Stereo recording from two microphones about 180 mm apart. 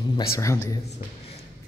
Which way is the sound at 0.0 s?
25° left (ahead or behind).